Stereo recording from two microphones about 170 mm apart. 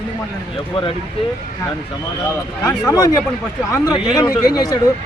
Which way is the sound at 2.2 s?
15° left (ahead or behind).